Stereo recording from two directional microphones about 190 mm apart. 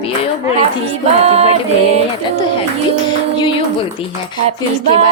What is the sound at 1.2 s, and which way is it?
Music, 35° right (ahead or behind).